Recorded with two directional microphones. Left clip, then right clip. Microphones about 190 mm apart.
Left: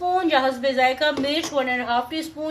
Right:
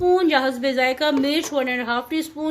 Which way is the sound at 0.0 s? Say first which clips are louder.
Right 2 dB; 60° right (ahead or behind).